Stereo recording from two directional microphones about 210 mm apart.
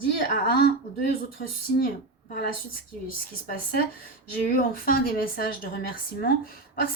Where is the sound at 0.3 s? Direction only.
45° left (ahead or behind).